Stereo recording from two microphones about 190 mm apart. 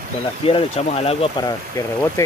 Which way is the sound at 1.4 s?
20° left (ahead or behind).